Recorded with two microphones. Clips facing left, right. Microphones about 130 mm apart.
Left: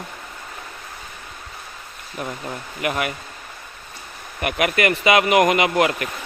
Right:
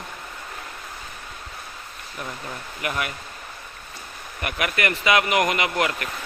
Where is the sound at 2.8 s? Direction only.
20° left (ahead or behind).